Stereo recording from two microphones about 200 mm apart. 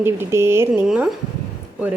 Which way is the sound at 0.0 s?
10° right (ahead or behind).